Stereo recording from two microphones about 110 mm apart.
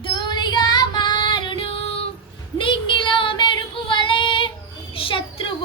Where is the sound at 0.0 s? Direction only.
45° left (ahead or behind).